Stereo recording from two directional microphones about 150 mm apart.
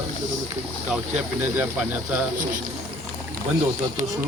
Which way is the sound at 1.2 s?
10° right (ahead or behind).